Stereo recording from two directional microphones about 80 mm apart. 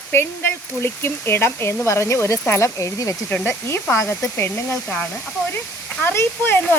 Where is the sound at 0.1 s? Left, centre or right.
Left.